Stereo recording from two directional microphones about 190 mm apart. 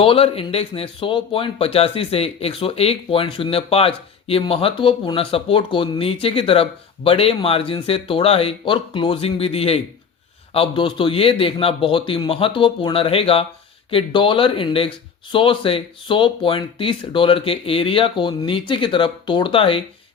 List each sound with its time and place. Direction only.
0.0 s speech: 30° left (ahead or behind)